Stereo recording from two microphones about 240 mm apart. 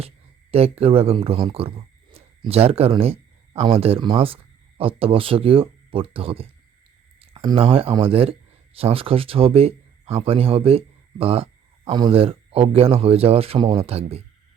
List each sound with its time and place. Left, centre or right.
0.5 s speech: right